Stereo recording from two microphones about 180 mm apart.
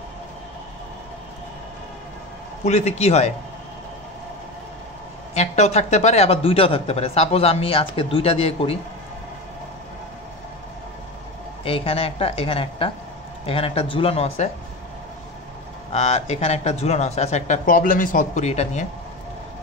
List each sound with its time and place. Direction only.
2.6 s a man's voice: 40° left (ahead or behind)
5.3 s a man's voice: 35° left (ahead or behind)
11.6 s a man's voice: 30° left (ahead or behind)
15.9 s a man's voice: 35° left (ahead or behind)